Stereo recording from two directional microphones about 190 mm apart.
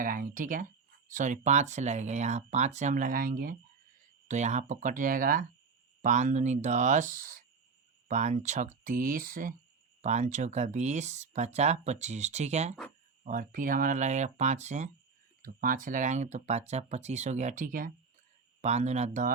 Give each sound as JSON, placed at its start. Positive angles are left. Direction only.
{"t": 0.0, "sound": "speech", "side_deg": -45}
{"t": 4.3, "sound": "speech", "side_deg": -40}
{"t": 18.6, "sound": "speech", "side_deg": -35}